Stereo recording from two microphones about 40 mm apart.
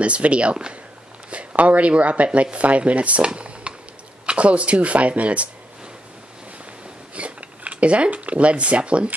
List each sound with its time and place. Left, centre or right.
0.0 s speech: right
1.3 s speech: right
3.3 s a sound: right
4.3 s speech: right
7.2 s speech: right